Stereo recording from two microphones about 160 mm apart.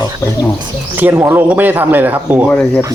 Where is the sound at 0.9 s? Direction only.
10° right (ahead or behind).